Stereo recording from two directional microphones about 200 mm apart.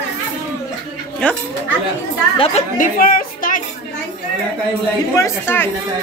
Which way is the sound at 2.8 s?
45° left (ahead or behind).